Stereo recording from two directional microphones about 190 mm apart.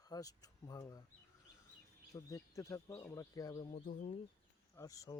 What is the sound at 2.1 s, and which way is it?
Speech, 15° left (ahead or behind).